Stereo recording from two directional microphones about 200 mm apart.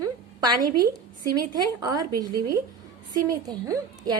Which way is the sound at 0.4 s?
20° right (ahead or behind).